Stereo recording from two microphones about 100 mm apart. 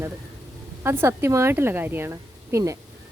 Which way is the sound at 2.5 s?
30° right (ahead or behind).